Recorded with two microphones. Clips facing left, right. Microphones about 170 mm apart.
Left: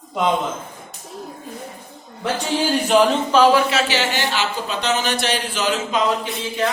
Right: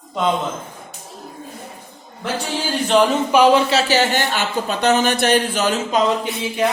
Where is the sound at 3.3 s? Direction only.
15° right (ahead or behind).